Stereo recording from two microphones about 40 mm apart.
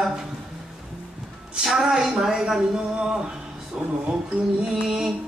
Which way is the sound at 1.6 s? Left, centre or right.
Centre.